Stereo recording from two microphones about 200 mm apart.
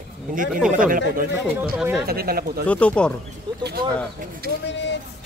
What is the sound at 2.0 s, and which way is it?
Speech, 50° right (ahead or behind).